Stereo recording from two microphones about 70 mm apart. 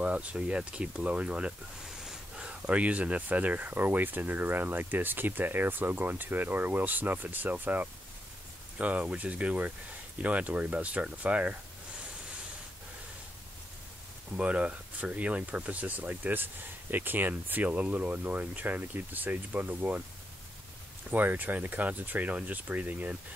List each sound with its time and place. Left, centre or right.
0.0 s speech: centre
14.3 s speech: centre
21.1 s speech: right